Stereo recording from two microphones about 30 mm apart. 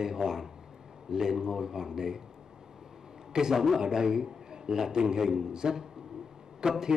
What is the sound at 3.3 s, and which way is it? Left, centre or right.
A man's voice, right.